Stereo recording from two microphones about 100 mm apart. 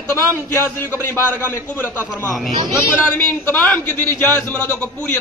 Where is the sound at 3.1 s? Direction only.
20° left (ahead or behind).